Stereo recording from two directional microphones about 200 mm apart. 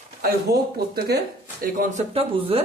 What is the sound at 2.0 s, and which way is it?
Speech, 30° right (ahead or behind).